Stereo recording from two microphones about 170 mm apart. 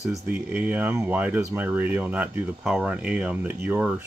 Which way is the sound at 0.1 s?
10° right (ahead or behind).